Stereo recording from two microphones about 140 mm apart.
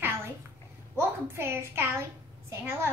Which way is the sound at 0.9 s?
15° right (ahead or behind).